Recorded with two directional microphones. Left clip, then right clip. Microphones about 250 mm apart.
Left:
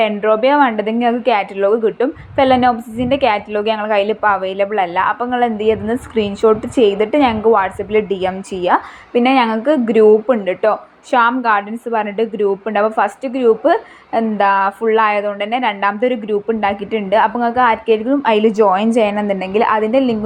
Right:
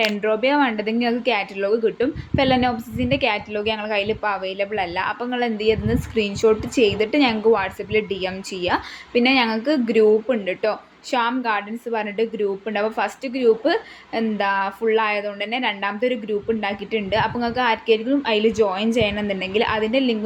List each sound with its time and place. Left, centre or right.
0.0 s a woman's voice: centre